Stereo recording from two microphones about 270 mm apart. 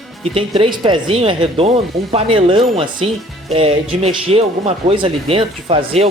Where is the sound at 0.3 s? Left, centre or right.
Right.